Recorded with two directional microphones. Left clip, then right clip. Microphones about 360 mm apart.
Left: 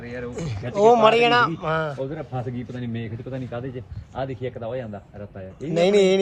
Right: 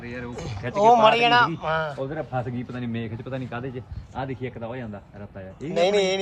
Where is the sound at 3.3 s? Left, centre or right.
Centre.